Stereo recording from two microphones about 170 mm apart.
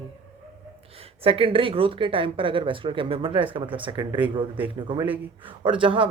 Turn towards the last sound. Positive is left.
turn(degrees=-30)  # may be behind; listen again after turning